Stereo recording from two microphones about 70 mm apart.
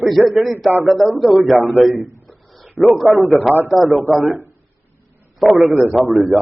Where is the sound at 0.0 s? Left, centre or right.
Centre.